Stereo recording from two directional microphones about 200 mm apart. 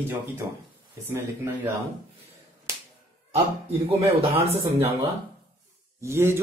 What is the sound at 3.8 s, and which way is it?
A man's voice, 30° right (ahead or behind).